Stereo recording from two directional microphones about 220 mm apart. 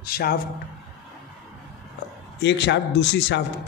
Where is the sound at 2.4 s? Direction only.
50° left (ahead or behind).